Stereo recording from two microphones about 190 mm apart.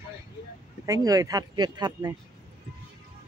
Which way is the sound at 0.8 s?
20° right (ahead or behind).